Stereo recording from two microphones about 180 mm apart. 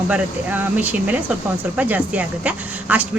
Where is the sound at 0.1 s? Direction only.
10° right (ahead or behind).